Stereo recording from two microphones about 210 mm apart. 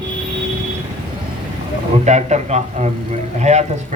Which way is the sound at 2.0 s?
35° right (ahead or behind).